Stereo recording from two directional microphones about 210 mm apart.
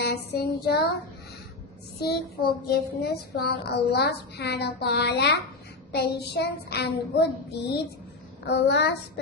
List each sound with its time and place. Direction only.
0.0 s child singing: 50° left (ahead or behind)
2.0 s child singing: 50° left (ahead or behind)